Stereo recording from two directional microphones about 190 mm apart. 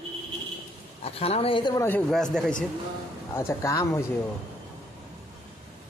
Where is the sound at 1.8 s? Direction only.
10° left (ahead or behind).